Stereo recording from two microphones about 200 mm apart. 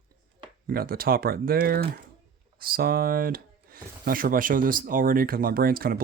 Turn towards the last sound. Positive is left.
turn(degrees=-45)  # may be behind; listen again after turning